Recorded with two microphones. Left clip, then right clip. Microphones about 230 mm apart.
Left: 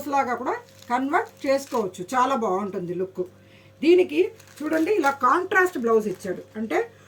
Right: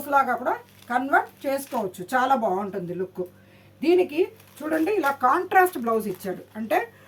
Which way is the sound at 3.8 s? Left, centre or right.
Centre.